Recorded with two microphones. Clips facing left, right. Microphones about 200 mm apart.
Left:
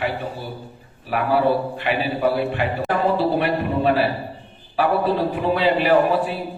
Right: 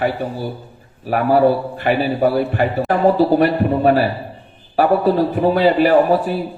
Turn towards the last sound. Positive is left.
turn(degrees=-45)  # may be behind; listen again after turning